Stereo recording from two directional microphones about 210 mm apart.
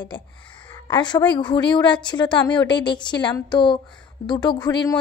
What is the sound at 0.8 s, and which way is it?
A woman's voice, 20° left (ahead or behind).